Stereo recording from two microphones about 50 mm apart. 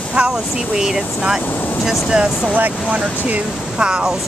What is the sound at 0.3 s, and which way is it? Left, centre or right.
Speech, centre.